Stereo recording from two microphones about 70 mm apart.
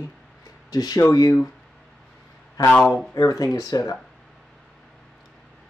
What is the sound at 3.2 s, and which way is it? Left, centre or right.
Speech, left.